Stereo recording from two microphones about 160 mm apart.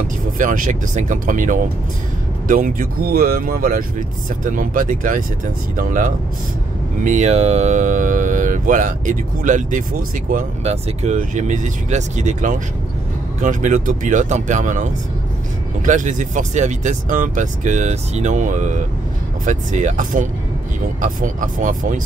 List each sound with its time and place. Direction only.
0.4 s speech: 55° right (ahead or behind)